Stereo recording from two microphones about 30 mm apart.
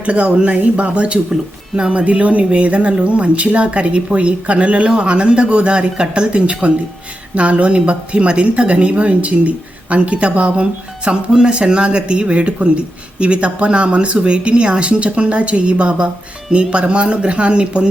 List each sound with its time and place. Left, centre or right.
0.0 s speech: right
1.3 s speech: right
1.9 s speech: right
6.4 s speech: right